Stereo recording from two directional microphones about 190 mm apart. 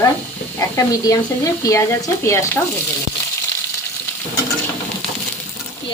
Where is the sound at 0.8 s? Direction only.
15° left (ahead or behind).